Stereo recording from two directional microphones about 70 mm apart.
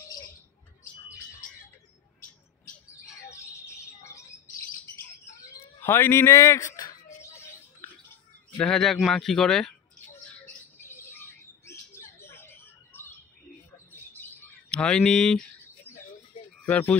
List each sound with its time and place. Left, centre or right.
3.8 s bird: left
5.8 s speech: left
7.2 s bird: left
8.5 s speech: centre
10.8 s bird: left
14.7 s speech: centre
16.6 s speech: left